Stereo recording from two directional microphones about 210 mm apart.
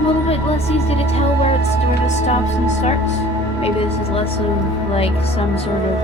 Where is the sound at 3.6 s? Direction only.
25° left (ahead or behind).